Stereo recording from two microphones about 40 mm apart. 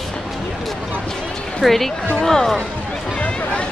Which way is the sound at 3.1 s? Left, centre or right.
Left.